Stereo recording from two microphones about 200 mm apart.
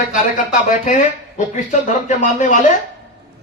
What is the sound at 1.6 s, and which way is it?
A man's voice, 40° left (ahead or behind).